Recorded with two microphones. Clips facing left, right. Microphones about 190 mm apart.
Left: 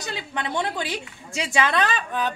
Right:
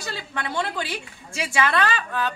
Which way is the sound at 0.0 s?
20° left (ahead or behind).